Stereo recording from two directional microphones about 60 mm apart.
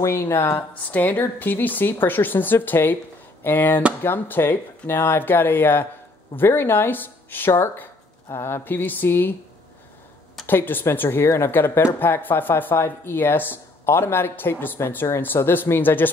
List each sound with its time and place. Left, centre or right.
0.0 s speech: left
0.9 s speech: left
10.4 s speech: left